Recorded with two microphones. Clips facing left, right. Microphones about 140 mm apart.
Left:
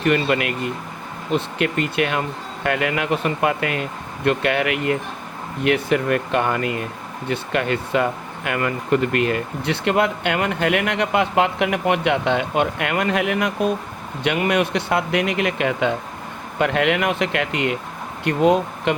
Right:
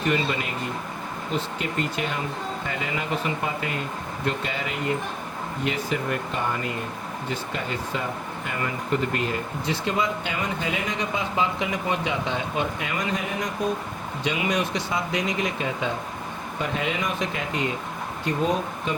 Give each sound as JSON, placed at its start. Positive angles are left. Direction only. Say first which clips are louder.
{"t": 0.0, "sound": "speech", "louder": "left 6 dB", "side_deg": 65}
{"t": 14.3, "sound": "speech", "louder": "left 6 dB", "side_deg": 60}